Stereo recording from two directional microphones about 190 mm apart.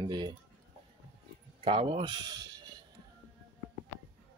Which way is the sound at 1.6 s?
30° right (ahead or behind).